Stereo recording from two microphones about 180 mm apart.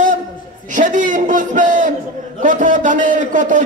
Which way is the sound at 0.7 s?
45° right (ahead or behind).